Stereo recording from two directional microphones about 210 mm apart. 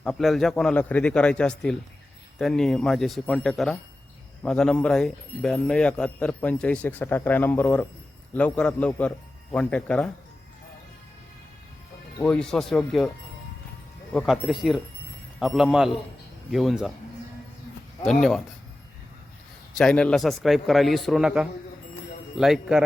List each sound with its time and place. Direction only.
0.0 s speech: centre (ahead or behind)
12.2 s speech: 5° left (ahead or behind)
14.1 s speech: centre (ahead or behind)
18.0 s speech: centre (ahead or behind)
19.7 s speech: 5° left (ahead or behind)